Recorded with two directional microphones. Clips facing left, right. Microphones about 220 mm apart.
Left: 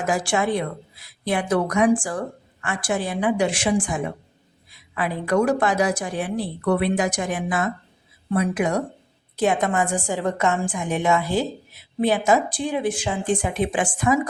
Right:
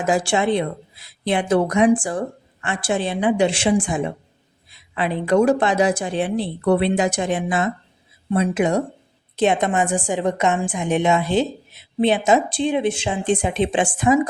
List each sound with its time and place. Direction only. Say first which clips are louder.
0.0 s a woman's voice: right 3 dB; 25° right (ahead or behind)